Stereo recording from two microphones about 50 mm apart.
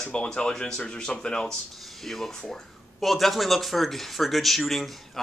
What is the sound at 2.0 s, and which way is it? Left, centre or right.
Speech, centre.